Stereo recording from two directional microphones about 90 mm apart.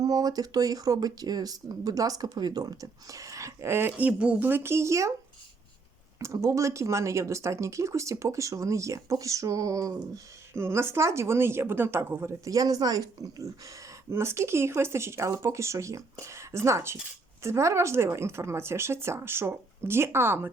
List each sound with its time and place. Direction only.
0.0 s speech: 45° right (ahead or behind)
6.1 s speech: 35° right (ahead or behind)
10.5 s a woman's voice: 30° right (ahead or behind)
12.5 s speech: 40° right (ahead or behind)
14.1 s a woman's voice: 30° right (ahead or behind)